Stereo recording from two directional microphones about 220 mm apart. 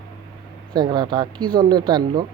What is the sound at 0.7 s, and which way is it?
Speech, 20° right (ahead or behind).